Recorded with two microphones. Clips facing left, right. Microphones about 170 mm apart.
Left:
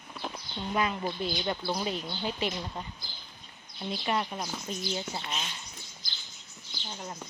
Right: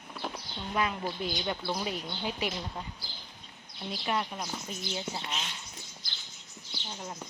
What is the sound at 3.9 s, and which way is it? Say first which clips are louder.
Speech: left 2 dB; centre (ahead or behind).